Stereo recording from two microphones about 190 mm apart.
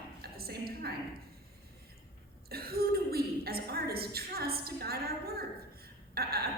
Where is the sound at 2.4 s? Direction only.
55° right (ahead or behind).